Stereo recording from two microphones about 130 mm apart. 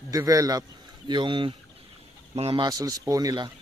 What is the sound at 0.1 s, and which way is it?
Speech, 25° right (ahead or behind).